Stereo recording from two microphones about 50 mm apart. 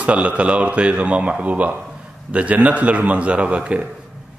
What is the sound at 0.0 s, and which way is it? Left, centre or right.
A man's voice, right.